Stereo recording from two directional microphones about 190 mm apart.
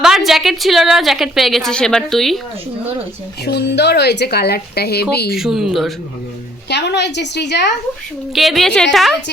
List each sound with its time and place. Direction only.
0.0 s a woman's voice: centre (ahead or behind)
3.4 s speech: 60° left (ahead or behind)
5.3 s a woman's voice: centre (ahead or behind)
6.7 s a woman's voice: 65° left (ahead or behind)
8.4 s a woman's voice: centre (ahead or behind)